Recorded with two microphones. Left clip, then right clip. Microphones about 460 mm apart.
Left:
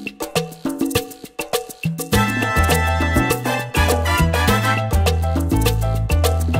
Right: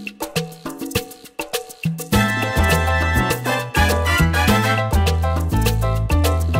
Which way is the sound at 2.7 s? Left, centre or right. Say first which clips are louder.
Even; left.